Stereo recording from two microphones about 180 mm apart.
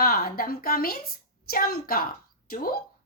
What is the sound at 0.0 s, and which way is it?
A woman's voice, 55° left (ahead or behind).